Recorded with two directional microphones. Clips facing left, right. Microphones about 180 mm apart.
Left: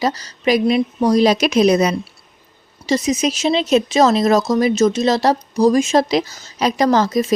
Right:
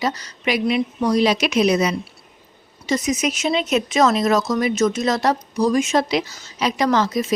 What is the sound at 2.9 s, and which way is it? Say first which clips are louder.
Speech: left 3 dB; 30° left (ahead or behind).